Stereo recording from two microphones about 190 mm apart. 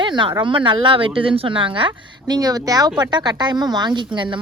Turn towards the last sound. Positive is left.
turn(degrees=-25)  # may be behind; listen again after turning